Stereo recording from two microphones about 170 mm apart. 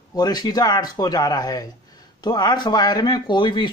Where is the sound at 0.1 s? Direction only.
25° left (ahead or behind).